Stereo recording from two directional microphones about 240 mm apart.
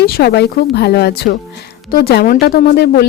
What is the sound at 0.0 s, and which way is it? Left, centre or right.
Speech, left.